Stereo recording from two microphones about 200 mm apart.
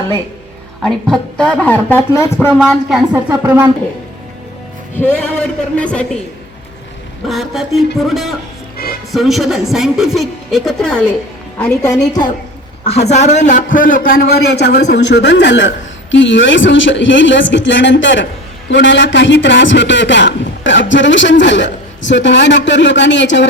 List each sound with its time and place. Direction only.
0.8 s speech: centre (ahead or behind)
2.6 s speech: centre (ahead or behind)
4.9 s speech: 5° left (ahead or behind)
7.3 s speech: centre (ahead or behind)
11.6 s speech: 15° left (ahead or behind)
12.8 s a man's voice: 30° left (ahead or behind); by 23.5 s 65° left (ahead or behind)